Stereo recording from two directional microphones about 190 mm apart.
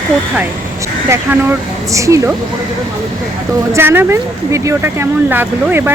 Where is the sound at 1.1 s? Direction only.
15° right (ahead or behind).